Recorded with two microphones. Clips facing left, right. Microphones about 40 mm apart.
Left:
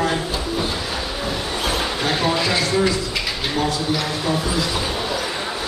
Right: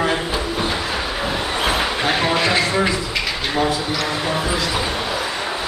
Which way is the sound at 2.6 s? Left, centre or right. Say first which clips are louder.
Even; right.